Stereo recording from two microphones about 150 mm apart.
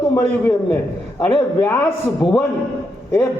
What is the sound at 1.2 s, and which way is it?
Speech, 20° left (ahead or behind).